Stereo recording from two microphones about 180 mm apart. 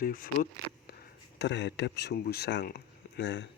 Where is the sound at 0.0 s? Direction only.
50° left (ahead or behind).